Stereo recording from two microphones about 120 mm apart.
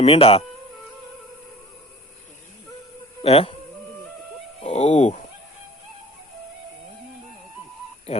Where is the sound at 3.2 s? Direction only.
55° left (ahead or behind).